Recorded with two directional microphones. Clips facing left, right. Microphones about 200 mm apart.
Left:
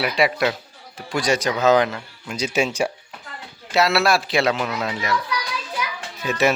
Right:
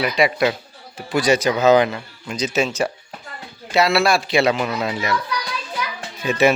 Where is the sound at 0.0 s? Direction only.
Centre (ahead or behind).